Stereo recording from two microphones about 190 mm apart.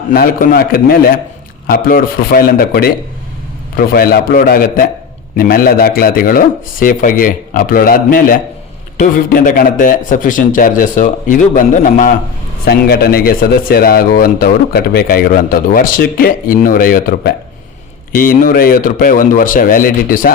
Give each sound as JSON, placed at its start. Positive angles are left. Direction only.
{"t": 0.1, "sound": "speech", "side_deg": 50}